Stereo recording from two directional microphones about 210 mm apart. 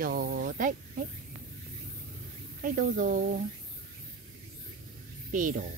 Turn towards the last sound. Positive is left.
turn(degrees=-40)  # may be behind; listen again after turning